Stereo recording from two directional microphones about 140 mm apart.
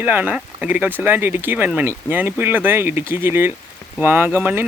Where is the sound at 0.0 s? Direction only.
15° right (ahead or behind).